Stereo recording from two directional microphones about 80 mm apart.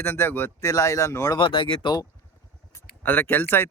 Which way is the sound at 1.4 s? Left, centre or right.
Left.